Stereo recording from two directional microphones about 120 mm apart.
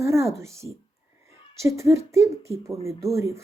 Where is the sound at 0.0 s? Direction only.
25° right (ahead or behind).